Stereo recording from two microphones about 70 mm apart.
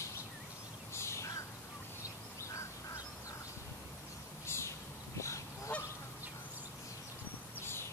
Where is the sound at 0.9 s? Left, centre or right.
Left.